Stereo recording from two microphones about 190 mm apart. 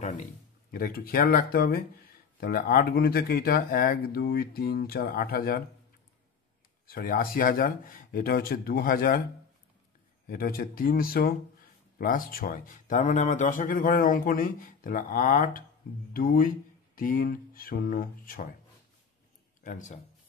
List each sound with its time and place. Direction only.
0.7 s speech: 50° left (ahead or behind)
6.9 s speech: 50° left (ahead or behind)
10.2 s speech: 50° left (ahead or behind)
19.6 s a man's voice: 45° left (ahead or behind)